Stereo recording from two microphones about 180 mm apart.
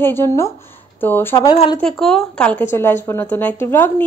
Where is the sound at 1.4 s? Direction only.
25° left (ahead or behind).